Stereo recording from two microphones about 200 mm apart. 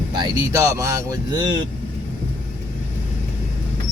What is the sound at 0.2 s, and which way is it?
Speech, 15° right (ahead or behind).